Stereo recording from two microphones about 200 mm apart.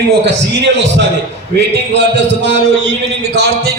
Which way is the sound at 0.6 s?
60° right (ahead or behind).